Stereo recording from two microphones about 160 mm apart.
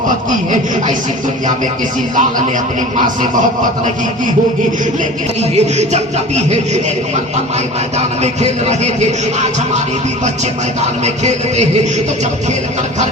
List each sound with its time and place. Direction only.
0.3 s music: 50° right (ahead or behind)
5.4 s music: 45° right (ahead or behind)
7.9 s music: 45° right (ahead or behind)
11.0 s music: 45° right (ahead or behind)